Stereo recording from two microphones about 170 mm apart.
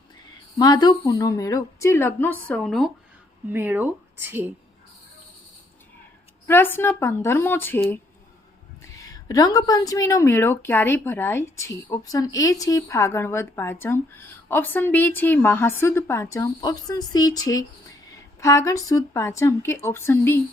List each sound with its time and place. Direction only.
0.6 s a woman's voice: 25° left (ahead or behind)
2.5 s speech: centre (ahead or behind)
3.5 s speech: 10° right (ahead or behind)
6.5 s a woman's voice: 15° left (ahead or behind)